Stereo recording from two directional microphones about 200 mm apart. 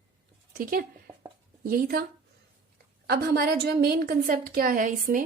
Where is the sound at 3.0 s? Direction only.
50° right (ahead or behind).